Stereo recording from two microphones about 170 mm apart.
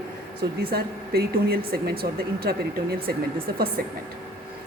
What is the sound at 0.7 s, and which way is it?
Speech, 65° right (ahead or behind).